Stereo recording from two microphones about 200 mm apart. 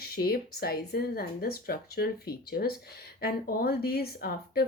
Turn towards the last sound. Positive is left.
turn(degrees=50)  # may be behind; listen again after turning